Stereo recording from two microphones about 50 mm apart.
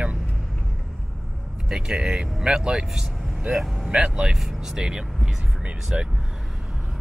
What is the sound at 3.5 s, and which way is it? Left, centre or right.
Speech, centre.